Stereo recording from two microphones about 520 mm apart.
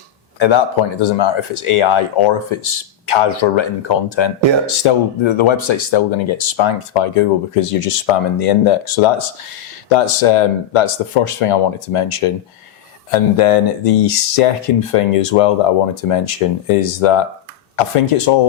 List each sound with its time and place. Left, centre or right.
0.3 s speech: left
7.5 s speech: left
13.1 s speech: left